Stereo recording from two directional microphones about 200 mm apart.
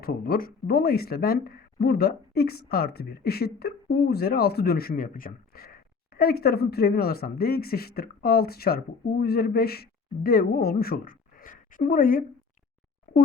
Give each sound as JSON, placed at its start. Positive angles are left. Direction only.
{"t": 0.0, "sound": "speech", "side_deg": 45}